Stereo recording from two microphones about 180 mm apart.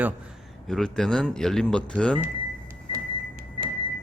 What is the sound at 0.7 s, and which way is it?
Speech, 5° left (ahead or behind).